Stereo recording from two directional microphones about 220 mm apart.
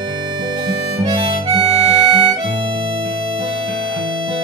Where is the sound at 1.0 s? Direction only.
20° right (ahead or behind).